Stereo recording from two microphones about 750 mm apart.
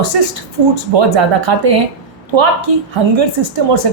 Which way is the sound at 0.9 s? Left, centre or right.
Right.